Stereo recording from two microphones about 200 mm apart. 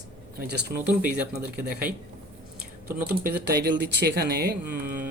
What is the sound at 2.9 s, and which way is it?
Speech, 45° right (ahead or behind).